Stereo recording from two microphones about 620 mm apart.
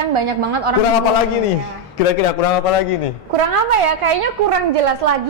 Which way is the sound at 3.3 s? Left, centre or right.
Right.